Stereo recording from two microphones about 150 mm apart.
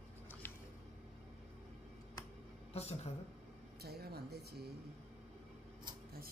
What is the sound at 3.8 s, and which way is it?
Speech, 90° right.